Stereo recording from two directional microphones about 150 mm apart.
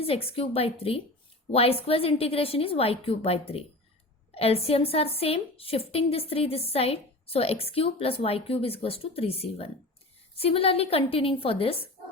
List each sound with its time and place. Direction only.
0.0 s a woman's voice: 40° left (ahead or behind)